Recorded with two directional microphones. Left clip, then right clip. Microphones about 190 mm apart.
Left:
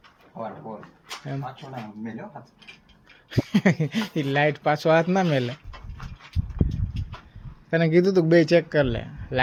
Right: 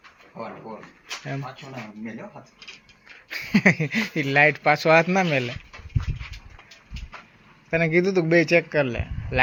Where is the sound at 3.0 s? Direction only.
10° left (ahead or behind).